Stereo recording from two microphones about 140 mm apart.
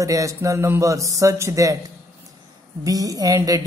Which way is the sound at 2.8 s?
25° right (ahead or behind).